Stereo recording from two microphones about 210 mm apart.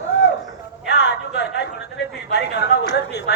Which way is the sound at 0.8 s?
55° left (ahead or behind).